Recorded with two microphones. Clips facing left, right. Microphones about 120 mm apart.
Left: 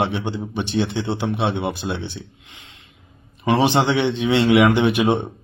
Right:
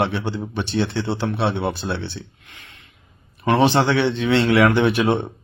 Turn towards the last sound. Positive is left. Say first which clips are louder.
# even
turn(degrees=15)  # may be behind; listen again after turning